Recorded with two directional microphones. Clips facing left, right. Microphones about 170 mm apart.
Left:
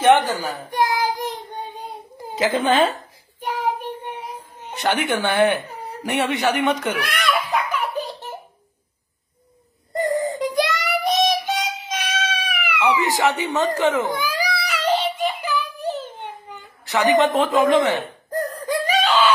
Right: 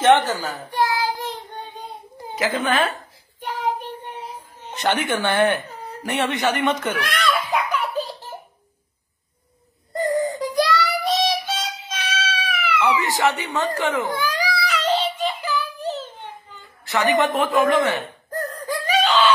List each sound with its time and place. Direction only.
0.0 s a child's voice: 15° left (ahead or behind)
2.3 s a sound: 25° left (ahead or behind)
7.8 s baby laughter: 20° left (ahead or behind)
9.9 s child singing: 25° left (ahead or behind)
14.7 s music: 10° left (ahead or behind)
16.4 s a sound: 15° left (ahead or behind)
16.9 s speech: 20° left (ahead or behind)
18.9 s wail: 5° left (ahead or behind)